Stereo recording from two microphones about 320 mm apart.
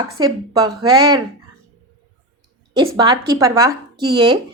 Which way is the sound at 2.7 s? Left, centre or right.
Centre.